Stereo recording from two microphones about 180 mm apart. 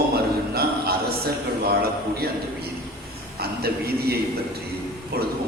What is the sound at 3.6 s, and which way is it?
Speech, 60° right (ahead or behind).